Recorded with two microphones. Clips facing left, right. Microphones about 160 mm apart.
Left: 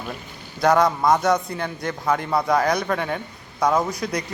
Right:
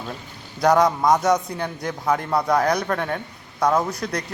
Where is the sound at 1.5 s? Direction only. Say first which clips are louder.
Even; centre (ahead or behind).